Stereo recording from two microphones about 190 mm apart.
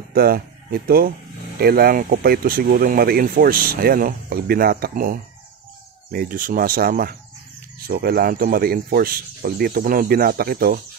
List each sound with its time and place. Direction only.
0.1 s speech: 50° right (ahead or behind)